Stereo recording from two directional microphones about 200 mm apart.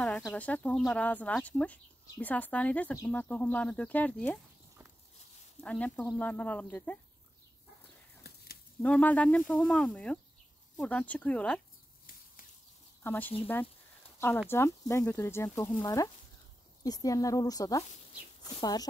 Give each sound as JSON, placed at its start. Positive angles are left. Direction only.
{"t": 0.3, "sound": "speech", "side_deg": 5}
{"t": 5.6, "sound": "speech", "side_deg": 5}
{"t": 8.8, "sound": "speech", "side_deg": 5}
{"t": 13.0, "sound": "speech", "side_deg": 10}
{"t": 14.5, "sound": "speech", "side_deg": 15}